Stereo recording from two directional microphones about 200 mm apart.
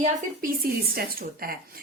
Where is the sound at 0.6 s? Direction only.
50° right (ahead or behind).